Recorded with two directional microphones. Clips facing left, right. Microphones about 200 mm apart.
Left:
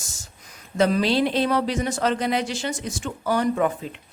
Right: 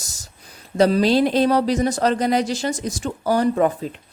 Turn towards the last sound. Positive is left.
turn(degrees=-35)  # may be behind; listen again after turning